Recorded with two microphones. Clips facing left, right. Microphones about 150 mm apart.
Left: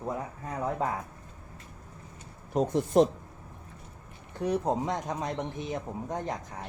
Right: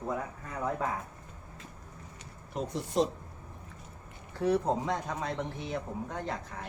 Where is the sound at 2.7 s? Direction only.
60° left (ahead or behind).